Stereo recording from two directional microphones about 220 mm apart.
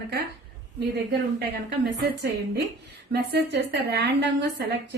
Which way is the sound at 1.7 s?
50° right (ahead or behind).